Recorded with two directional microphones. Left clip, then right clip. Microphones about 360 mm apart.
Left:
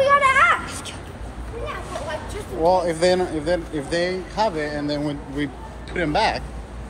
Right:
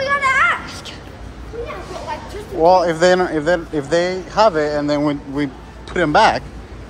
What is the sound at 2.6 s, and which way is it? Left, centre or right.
A man's voice, right.